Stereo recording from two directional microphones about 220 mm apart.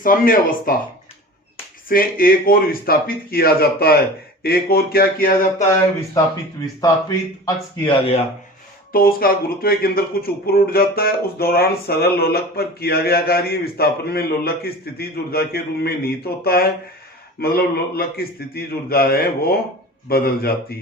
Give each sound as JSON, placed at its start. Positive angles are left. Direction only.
{"t": 0.0, "sound": "speech", "side_deg": 40}
{"t": 1.9, "sound": "speech", "side_deg": 40}
{"t": 6.8, "sound": "speech", "side_deg": 15}
{"t": 8.9, "sound": "speech", "side_deg": 40}